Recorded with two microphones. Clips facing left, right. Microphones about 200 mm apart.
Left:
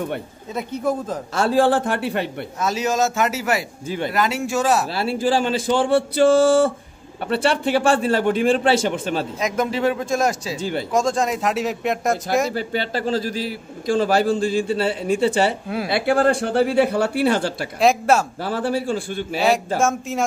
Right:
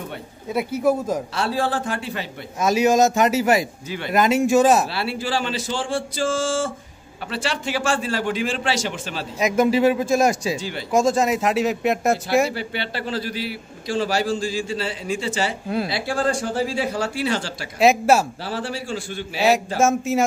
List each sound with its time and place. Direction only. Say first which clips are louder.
0.5 s a man's voice: right 3 dB; 10° right (ahead or behind)
1.3 s a man's voice: left 11 dB; 45° left (ahead or behind)
2.6 s a man's voice: right 4 dB; 15° right (ahead or behind)
4.9 s a man's voice: left 5 dB; 45° left (ahead or behind)
9.4 s a man's voice: right 6 dB; 10° right (ahead or behind)
12.5 s a man's voice: left 4 dB; 40° left (ahead or behind)
17.7 s speech: right 1 dB; 5° right (ahead or behind)
18.4 s a man's voice: left 6 dB; 50° left (ahead or behind)
19.8 s speech: right 2 dB; 5° right (ahead or behind)